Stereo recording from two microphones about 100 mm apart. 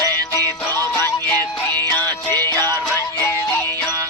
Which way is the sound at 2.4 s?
20° left (ahead or behind).